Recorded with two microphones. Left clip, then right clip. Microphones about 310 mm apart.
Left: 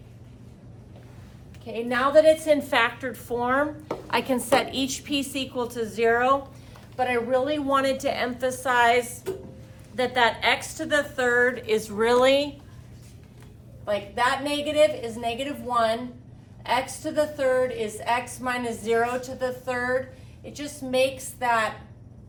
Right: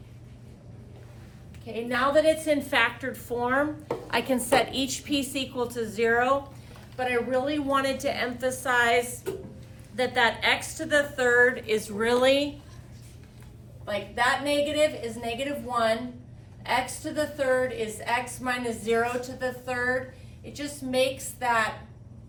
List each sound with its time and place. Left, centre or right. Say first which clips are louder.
1.6 s a woman's voice: left 2 dB; centre
13.8 s a woman's voice: left 2 dB; centre